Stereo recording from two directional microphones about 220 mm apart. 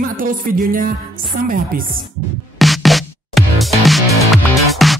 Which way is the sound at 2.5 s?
Centre (ahead or behind).